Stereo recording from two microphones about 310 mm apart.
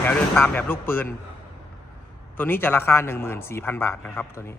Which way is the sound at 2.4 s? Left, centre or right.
Centre.